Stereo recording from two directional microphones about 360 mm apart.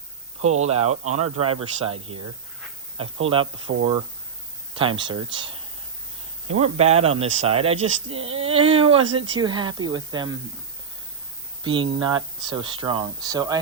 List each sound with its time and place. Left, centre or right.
0.4 s speech: centre
3.4 s speech: right
4.7 s speech: centre
6.6 s speech: centre
11.6 s speech: centre